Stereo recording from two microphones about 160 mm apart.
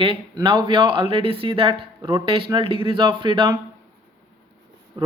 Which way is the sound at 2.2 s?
35° right (ahead or behind).